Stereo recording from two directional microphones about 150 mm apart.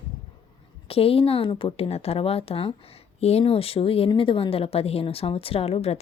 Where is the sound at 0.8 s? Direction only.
40° left (ahead or behind).